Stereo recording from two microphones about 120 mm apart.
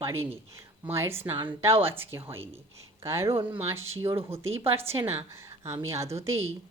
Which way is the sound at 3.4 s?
45° right (ahead or behind).